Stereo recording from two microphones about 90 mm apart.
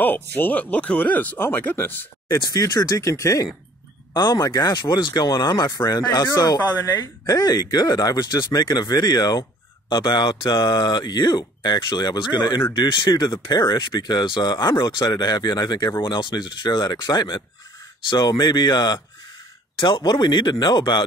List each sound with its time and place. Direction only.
0.0 s speech: 20° left (ahead or behind)
2.3 s speech: 40° left (ahead or behind)
4.1 s speech: 50° left (ahead or behind)
16.0 s speech: 60° left (ahead or behind)
20.1 s speech: 55° left (ahead or behind)